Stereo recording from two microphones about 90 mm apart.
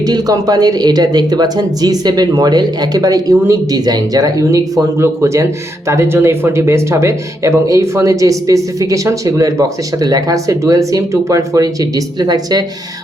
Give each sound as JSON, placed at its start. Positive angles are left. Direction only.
{"t": 0.0, "sound": "speech", "side_deg": -45}